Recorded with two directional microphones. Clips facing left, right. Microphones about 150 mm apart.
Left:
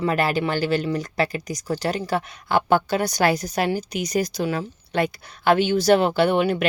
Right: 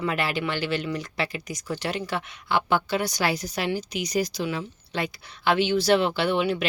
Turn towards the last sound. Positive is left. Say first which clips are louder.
# left 5 dB
turn(degrees=50)  # may be behind; listen again after turning